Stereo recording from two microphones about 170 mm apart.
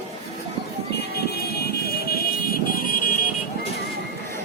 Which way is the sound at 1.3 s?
70° left (ahead or behind).